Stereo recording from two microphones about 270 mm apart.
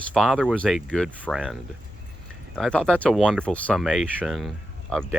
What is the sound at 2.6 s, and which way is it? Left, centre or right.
Speech, centre.